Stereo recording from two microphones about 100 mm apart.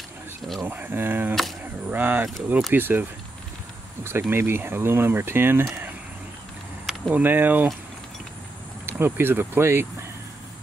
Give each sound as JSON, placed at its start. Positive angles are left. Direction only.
{"t": 0.4, "sound": "a sound", "side_deg": 0}
{"t": 0.7, "sound": "speech", "side_deg": -20}
{"t": 6.9, "sound": "speech", "side_deg": -15}
{"t": 8.8, "sound": "speech", "side_deg": -20}